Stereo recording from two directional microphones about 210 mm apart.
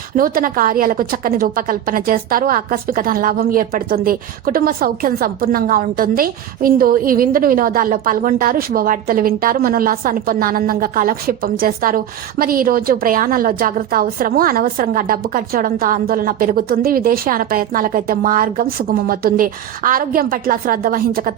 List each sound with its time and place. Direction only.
0.2 s a woman's voice: 40° right (ahead or behind)